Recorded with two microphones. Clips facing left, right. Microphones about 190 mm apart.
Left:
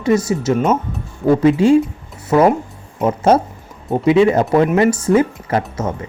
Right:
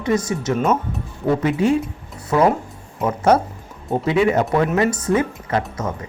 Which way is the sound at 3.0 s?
25° left (ahead or behind).